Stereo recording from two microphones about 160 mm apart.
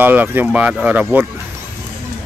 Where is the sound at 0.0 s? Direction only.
10° right (ahead or behind).